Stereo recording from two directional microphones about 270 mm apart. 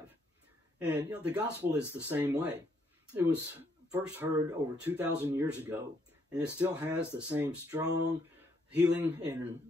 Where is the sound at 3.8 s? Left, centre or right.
Centre.